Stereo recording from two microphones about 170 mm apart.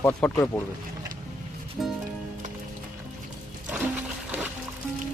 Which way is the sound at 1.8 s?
Centre (ahead or behind).